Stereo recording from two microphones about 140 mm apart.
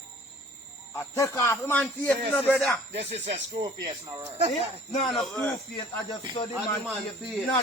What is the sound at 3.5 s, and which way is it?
Speech, 30° right (ahead or behind).